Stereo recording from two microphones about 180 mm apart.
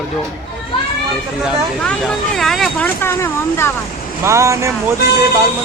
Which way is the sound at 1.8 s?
5° left (ahead or behind).